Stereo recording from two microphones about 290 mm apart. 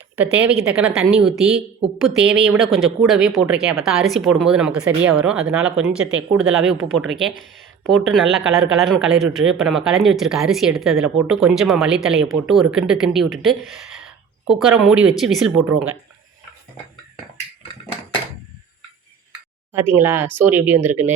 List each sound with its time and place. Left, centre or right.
0.2 s speech: centre
8.4 s speech: right
8.8 s speech: centre
19.7 s speech: centre